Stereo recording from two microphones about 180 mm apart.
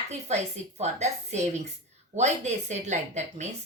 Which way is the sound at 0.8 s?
40° right (ahead or behind).